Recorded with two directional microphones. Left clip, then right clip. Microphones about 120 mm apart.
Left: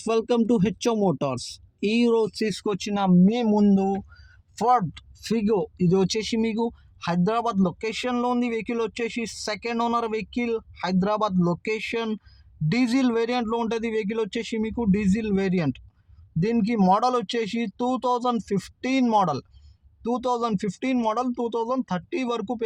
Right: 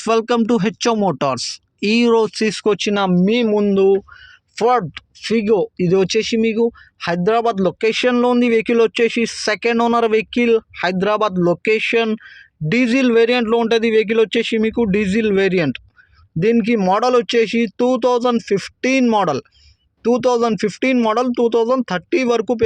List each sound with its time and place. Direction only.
0.0 s speech: 35° right (ahead or behind)
1.2 s speech: 35° right (ahead or behind)
3.1 s speech: 20° right (ahead or behind)
3.4 s speech: 5° right (ahead or behind)
7.0 s speech: 20° right (ahead or behind)